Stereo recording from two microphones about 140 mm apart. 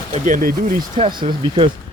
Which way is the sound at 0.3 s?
80° right.